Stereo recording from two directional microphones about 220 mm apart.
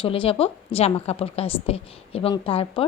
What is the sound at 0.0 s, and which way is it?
A woman's voice, 25° left (ahead or behind).